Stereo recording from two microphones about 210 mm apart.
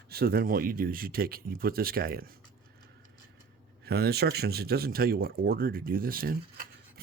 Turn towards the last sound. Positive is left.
turn(degrees=-45)  # may be behind; listen again after turning